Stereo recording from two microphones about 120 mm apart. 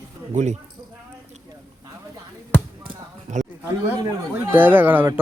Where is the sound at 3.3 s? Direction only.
85° right.